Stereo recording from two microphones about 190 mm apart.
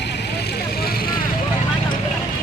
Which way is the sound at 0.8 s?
55° left (ahead or behind).